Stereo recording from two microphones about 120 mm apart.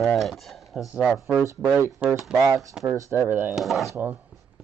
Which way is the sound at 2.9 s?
25° right (ahead or behind).